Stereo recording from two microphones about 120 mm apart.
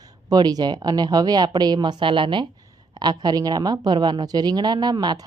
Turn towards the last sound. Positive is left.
turn(degrees=-35)  # may be behind; listen again after turning